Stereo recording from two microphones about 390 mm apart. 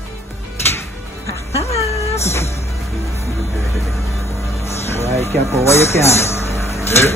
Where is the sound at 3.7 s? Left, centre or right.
Centre.